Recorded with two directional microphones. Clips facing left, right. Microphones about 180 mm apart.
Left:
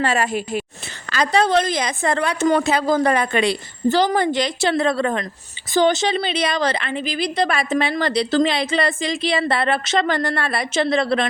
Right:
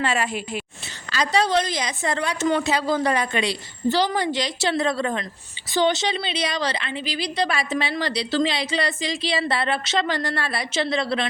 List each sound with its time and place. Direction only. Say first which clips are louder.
0.0 s a woman's voice: left 4 dB; 40° left (ahead or behind)
1.1 s a woman's voice: left 3 dB; 55° left (ahead or behind)
5.7 s a woman's voice: left 4 dB; 45° left (ahead or behind)